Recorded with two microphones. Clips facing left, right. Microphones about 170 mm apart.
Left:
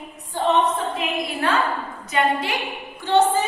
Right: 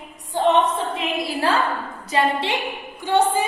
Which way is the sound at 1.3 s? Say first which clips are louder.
Right 3 dB; 30° right (ahead or behind).